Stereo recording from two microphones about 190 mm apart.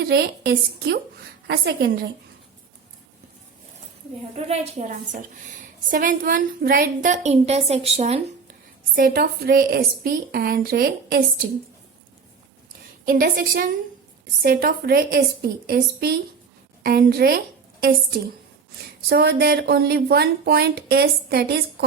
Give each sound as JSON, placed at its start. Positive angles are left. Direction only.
{"t": 0.0, "sound": "speech", "side_deg": -55}
{"t": 4.4, "sound": "a woman's voice", "side_deg": -35}
{"t": 9.0, "sound": "a woman's voice", "side_deg": -50}
{"t": 13.1, "sound": "a woman's voice", "side_deg": -50}
{"t": 19.0, "sound": "speech", "side_deg": -60}